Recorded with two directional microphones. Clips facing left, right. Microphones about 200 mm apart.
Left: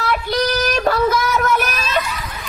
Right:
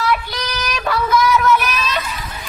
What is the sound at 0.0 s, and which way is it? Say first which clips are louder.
Child singing: left 2 dB; 45° left (ahead or behind).